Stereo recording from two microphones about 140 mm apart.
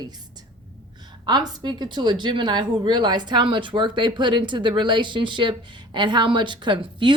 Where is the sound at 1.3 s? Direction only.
30° right (ahead or behind).